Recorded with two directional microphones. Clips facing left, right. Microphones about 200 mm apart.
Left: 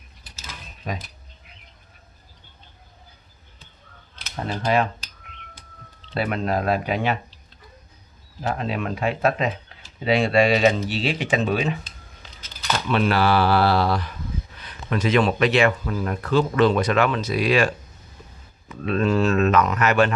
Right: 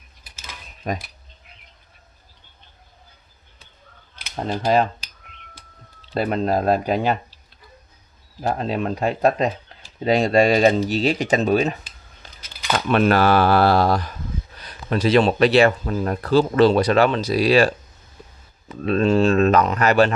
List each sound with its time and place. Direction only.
0.8 s speech: 50° right (ahead or behind)
6.1 s speech: 35° right (ahead or behind)
8.5 s speech: 35° right (ahead or behind)
12.8 s speech: 50° right (ahead or behind)